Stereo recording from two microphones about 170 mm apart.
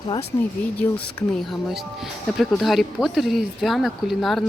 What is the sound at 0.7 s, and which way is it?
Speech, 10° left (ahead or behind).